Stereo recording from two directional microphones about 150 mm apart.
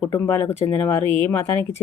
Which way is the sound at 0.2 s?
15° left (ahead or behind).